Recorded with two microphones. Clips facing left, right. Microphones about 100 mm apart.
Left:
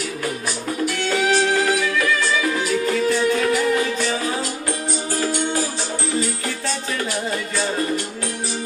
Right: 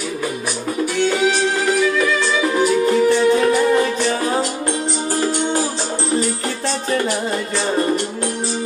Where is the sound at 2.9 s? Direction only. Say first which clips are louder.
Right 3 dB; 25° right (ahead or behind).